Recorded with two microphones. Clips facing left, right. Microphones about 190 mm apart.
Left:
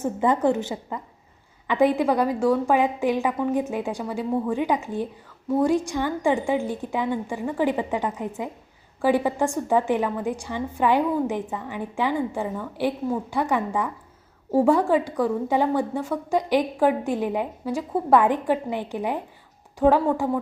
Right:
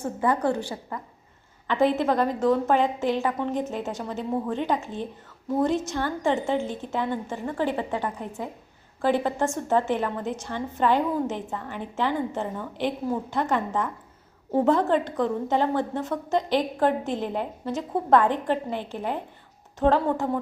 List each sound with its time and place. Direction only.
0.0 s a woman's voice: 20° left (ahead or behind)